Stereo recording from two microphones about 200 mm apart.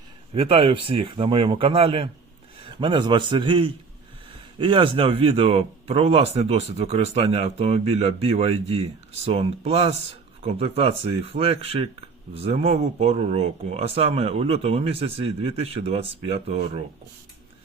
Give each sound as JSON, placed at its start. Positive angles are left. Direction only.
{"t": 0.3, "sound": "speech", "side_deg": -25}